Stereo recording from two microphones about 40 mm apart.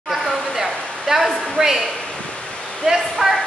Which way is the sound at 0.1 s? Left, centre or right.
Centre.